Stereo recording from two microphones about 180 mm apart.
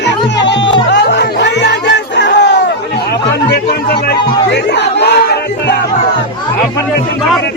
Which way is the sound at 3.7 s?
60° left (ahead or behind).